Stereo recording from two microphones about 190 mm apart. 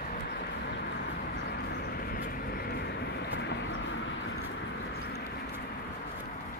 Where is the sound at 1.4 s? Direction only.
60° left (ahead or behind); by 4.1 s 75° left (ahead or behind).